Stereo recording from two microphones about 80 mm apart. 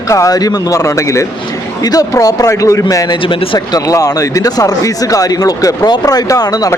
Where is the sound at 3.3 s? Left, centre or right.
Left.